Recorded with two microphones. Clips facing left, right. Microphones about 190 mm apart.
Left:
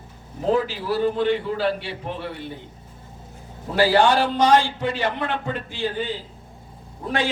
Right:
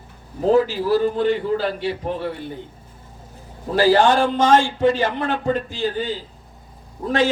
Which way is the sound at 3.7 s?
45° right (ahead or behind).